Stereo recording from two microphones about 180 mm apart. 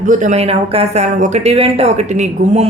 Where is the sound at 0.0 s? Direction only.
45° right (ahead or behind).